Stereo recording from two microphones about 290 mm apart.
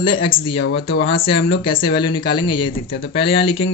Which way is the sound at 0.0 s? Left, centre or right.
Centre.